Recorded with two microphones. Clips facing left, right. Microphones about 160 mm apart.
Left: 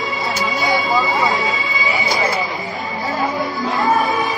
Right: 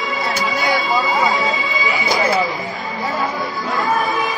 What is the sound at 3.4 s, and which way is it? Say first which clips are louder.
Chatter: left 2 dB; centre (ahead or behind).